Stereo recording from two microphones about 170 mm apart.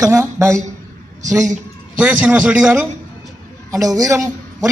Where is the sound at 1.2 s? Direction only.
45° right (ahead or behind).